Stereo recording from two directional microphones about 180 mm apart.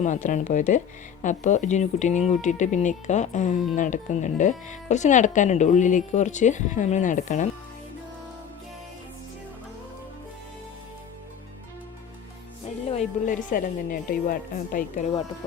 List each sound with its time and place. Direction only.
0.0 s speech: 45° left (ahead or behind)
12.9 s speech: 40° left (ahead or behind)